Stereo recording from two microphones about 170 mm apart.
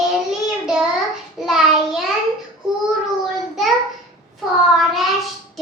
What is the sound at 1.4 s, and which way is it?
Child singing, centre (ahead or behind).